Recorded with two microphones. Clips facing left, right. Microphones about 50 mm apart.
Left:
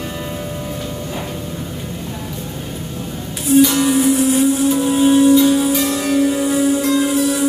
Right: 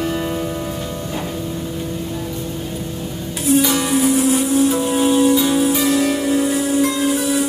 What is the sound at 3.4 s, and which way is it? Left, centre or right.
Music, centre.